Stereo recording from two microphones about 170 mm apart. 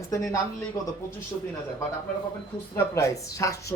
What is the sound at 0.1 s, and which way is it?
Speech, 20° left (ahead or behind).